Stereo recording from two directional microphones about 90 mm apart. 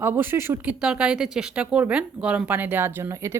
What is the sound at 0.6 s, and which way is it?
Speech, 10° right (ahead or behind).